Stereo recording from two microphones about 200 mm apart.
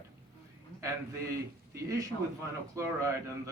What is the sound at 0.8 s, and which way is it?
A man's voice, 15° right (ahead or behind).